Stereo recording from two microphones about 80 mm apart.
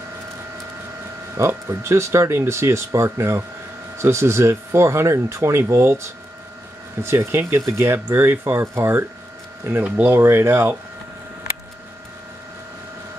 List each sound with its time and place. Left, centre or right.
1.3 s speech: right